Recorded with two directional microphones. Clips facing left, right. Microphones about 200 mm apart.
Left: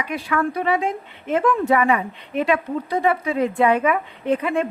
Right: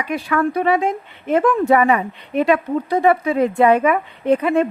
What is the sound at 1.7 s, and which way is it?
A woman's voice, 40° right (ahead or behind).